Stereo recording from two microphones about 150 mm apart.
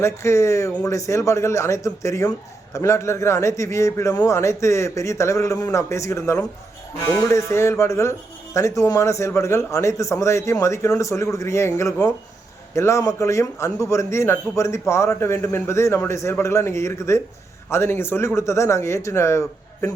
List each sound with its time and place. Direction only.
0.0 s a man's voice: 20° left (ahead or behind)